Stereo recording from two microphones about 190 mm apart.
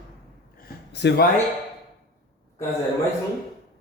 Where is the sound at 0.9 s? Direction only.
65° left (ahead or behind).